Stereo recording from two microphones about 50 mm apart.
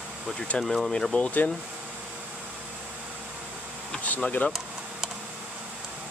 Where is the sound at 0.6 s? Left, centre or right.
Centre.